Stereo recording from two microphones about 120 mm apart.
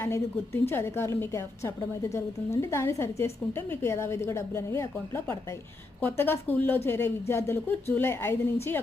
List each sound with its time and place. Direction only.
0.0 s a woman's voice: 25° left (ahead or behind)